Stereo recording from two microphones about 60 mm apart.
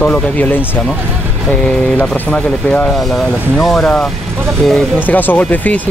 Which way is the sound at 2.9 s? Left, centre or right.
Centre.